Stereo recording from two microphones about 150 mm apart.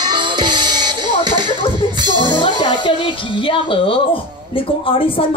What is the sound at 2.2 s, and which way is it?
Speech, 30° left (ahead or behind).